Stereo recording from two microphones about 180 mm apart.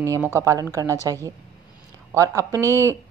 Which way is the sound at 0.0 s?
15° right (ahead or behind).